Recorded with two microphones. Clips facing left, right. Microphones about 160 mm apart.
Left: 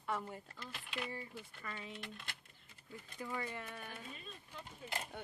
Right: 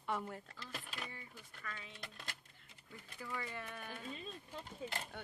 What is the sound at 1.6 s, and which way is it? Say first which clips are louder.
Speech: left 1 dB; 35° left (ahead or behind).